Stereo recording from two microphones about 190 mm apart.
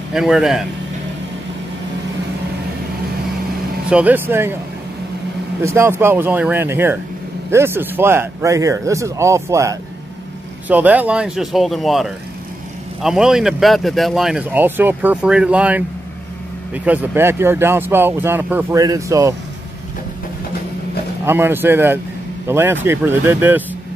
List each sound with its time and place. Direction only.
0.1 s speech: centre (ahead or behind)
3.9 s speech: 10° right (ahead or behind)
5.6 s speech: 15° right (ahead or behind)
21.3 s speech: 10° right (ahead or behind)